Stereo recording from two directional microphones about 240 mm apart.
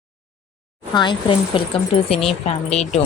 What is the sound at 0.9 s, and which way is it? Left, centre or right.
Speech, centre.